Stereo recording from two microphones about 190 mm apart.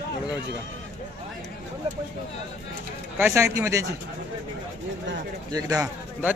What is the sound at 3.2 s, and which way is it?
Speech, 15° right (ahead or behind).